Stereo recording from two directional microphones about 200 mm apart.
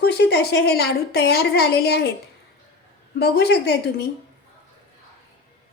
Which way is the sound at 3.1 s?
55° left (ahead or behind).